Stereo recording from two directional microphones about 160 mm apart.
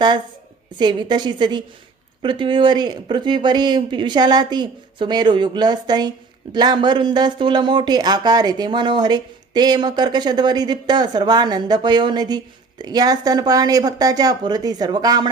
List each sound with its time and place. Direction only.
0.8 s speech: 30° right (ahead or behind)